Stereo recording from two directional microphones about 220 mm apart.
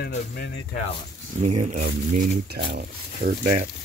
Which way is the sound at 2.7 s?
45° right (ahead or behind).